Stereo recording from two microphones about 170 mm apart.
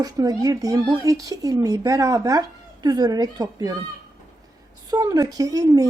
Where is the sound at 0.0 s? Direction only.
20° right (ahead or behind).